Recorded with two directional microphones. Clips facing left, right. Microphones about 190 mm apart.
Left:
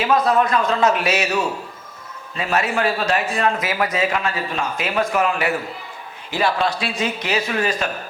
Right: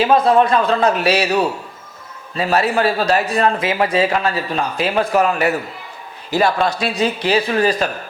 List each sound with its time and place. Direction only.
0.1 s speech: 30° right (ahead or behind)